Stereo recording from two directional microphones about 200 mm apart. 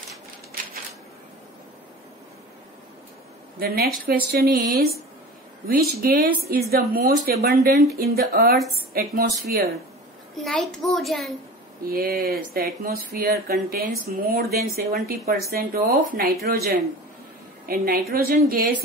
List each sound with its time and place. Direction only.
3.5 s speech: 50° right (ahead or behind)
10.3 s a child's voice: centre (ahead or behind)
11.9 s speech: 50° right (ahead or behind)